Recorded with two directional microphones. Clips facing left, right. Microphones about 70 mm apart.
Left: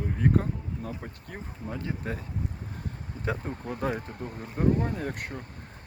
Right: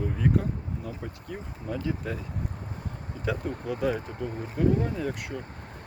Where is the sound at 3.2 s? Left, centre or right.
Left.